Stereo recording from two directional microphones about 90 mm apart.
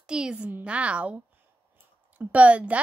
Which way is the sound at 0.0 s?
10° right (ahead or behind).